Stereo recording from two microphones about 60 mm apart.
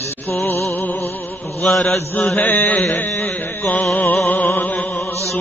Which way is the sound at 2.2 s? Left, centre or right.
Left.